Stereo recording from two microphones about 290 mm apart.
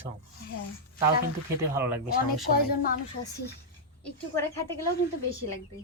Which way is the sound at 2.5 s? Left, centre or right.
Left.